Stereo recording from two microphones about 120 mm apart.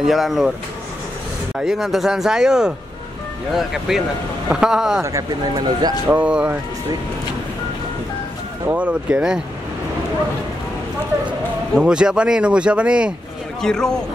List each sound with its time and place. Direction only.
0.0 s speech: centre (ahead or behind)
1.6 s speech: centre (ahead or behind)
5.0 s speech: 30° right (ahead or behind)
6.0 s speech: 10° right (ahead or behind)
8.6 s speech: 10° right (ahead or behind)
11.8 s speech: 5° right (ahead or behind)
13.6 s speech: 5° left (ahead or behind)